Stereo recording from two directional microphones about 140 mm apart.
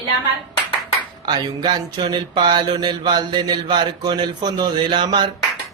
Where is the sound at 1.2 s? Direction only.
30° right (ahead or behind).